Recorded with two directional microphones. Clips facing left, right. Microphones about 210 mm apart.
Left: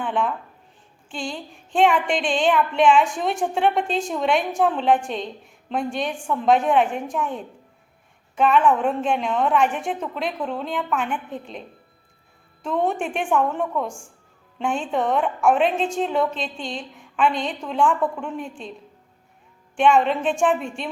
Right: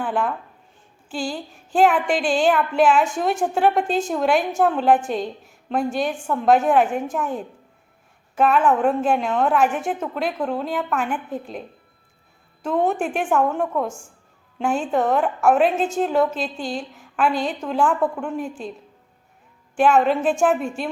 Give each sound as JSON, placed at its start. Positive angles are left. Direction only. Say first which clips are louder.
{"t": 0.0, "sound": "speech", "louder": "right 1 dB", "side_deg": -5}
{"t": 12.6, "sound": "speech", "louder": "right 2 dB", "side_deg": 0}
{"t": 19.7, "sound": "speech", "louder": "right 1 dB", "side_deg": -5}